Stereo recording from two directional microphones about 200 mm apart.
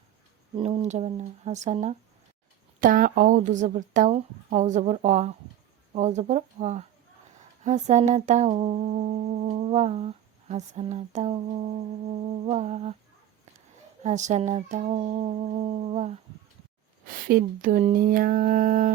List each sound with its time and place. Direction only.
0.5 s humming: 30° right (ahead or behind)
14.0 s humming: 35° right (ahead or behind)
17.2 s speech: 45° right (ahead or behind)